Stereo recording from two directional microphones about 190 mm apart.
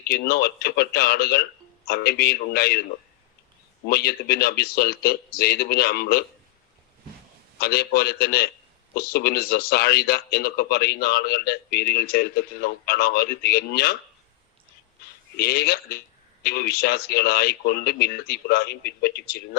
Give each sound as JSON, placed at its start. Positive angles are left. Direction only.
{"t": 0.1, "sound": "a man's voice", "side_deg": 55}
{"t": 3.8, "sound": "a man's voice", "side_deg": 55}
{"t": 7.6, "sound": "a man's voice", "side_deg": 55}
{"t": 15.4, "sound": "a man's voice", "side_deg": 55}